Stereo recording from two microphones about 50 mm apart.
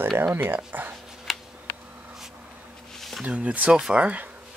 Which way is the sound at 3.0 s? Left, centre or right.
Centre.